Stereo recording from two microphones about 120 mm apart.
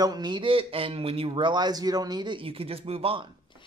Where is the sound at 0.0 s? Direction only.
35° right (ahead or behind); by 3.3 s 50° right (ahead or behind).